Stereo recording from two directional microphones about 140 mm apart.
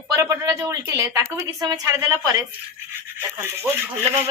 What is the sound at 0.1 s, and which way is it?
Speech, 20° right (ahead or behind).